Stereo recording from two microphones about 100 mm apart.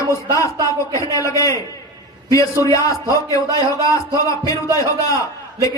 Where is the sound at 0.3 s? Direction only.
30° left (ahead or behind).